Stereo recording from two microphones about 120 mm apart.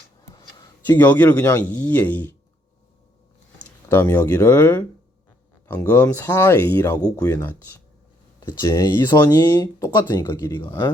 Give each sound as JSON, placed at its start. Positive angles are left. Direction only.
{"t": 0.3, "sound": "a sound", "side_deg": 30}
{"t": 0.9, "sound": "speech", "side_deg": 15}
{"t": 3.6, "sound": "speech", "side_deg": 15}
{"t": 8.6, "sound": "speech", "side_deg": 35}
{"t": 10.5, "sound": "speech", "side_deg": 20}